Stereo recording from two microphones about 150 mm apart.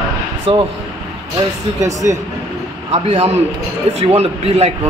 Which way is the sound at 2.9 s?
45° right (ahead or behind).